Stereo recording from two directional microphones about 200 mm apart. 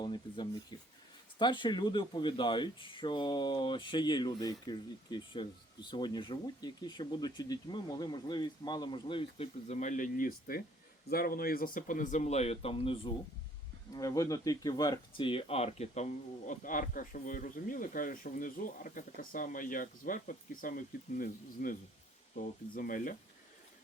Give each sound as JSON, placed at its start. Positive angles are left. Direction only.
{"t": 0.0, "sound": "speech", "side_deg": 20}